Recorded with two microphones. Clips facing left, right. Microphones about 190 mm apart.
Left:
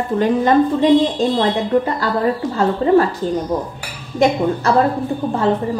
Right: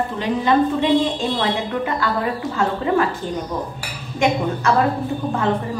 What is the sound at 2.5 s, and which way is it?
Speech, 35° left (ahead or behind).